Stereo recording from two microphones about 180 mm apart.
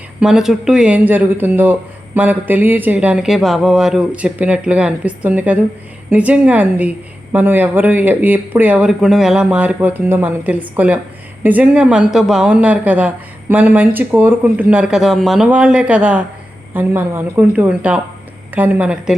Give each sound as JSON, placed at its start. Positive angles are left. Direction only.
{"t": 0.2, "sound": "speech", "side_deg": -5}